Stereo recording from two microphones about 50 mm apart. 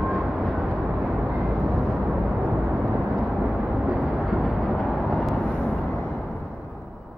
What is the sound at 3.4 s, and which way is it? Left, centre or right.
Vehicle, centre.